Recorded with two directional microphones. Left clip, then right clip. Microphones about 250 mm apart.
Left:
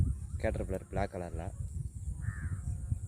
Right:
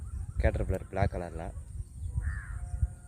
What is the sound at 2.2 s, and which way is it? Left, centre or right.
Crow, right.